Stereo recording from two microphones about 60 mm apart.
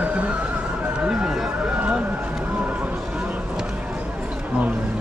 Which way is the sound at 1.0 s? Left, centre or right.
Centre.